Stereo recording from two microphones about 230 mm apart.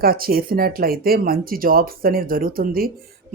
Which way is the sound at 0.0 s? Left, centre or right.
Right.